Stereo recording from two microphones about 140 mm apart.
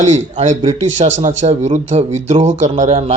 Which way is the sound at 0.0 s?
55° right (ahead or behind).